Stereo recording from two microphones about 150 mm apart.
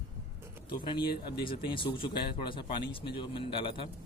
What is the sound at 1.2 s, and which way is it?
Speech, 35° left (ahead or behind).